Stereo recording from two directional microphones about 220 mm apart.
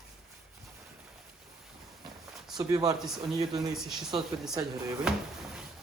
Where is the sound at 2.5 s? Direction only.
15° right (ahead or behind).